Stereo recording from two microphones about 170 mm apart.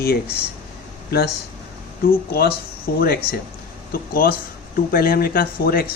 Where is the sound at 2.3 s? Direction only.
65° left (ahead or behind).